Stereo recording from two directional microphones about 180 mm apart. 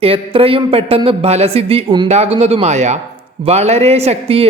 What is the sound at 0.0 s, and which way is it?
Speech, 30° right (ahead or behind).